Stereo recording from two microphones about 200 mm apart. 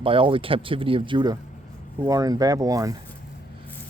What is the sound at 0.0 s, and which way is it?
Speech, 25° right (ahead or behind).